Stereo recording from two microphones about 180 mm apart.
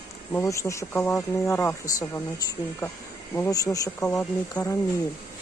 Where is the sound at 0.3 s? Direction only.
15° left (ahead or behind).